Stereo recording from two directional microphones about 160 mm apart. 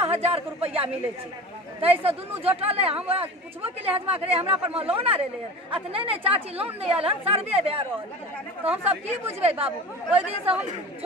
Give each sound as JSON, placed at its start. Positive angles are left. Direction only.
{"t": 0.0, "sound": "a woman's voice", "side_deg": -40}